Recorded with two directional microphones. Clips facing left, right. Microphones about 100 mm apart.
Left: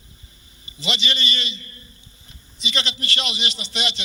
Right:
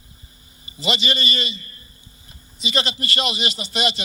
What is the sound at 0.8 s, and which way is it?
Speech, 45° right (ahead or behind).